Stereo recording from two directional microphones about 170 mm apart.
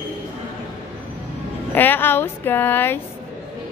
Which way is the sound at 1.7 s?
10° left (ahead or behind).